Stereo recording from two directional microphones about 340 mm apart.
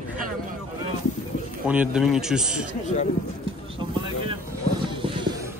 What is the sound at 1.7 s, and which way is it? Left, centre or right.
Speech, centre.